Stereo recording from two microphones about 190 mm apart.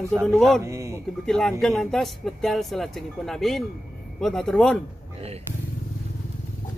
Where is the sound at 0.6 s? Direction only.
15° right (ahead or behind).